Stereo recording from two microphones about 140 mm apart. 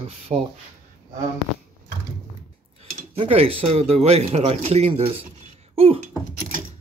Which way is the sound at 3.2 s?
45° right (ahead or behind).